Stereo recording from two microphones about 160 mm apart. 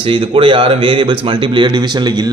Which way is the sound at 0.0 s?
35° right (ahead or behind).